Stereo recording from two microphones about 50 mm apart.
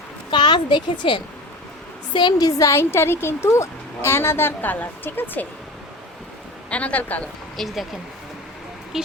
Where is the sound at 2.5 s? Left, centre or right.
Left.